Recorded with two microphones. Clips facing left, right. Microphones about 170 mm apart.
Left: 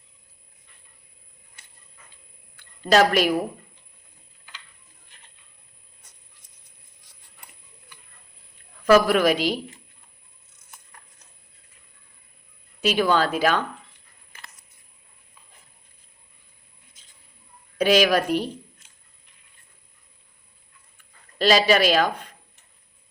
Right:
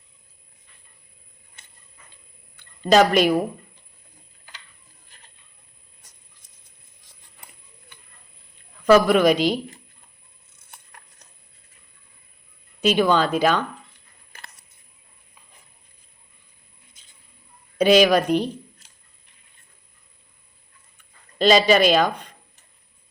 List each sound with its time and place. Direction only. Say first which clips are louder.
2.8 s speech: right 2 dB; 5° left (ahead or behind)
5.0 s train: right 2 dB; 35° right (ahead or behind)
8.8 s speech: right 2 dB; 5° left (ahead or behind)
12.8 s speech: right 2 dB; 10° left (ahead or behind)
14.3 s a sound: right 2 dB; 35° right (ahead or behind)
16.9 s mouse: right 1 dB; centre (ahead or behind)
17.7 s speech: right 3 dB; 5° left (ahead or behind)
18.8 s a sound: right 2 dB; 35° right (ahead or behind)
21.5 s speech: right 2 dB; 5° left (ahead or behind)